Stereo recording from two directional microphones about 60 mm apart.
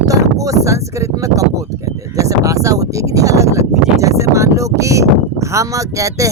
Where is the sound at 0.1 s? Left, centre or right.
Right.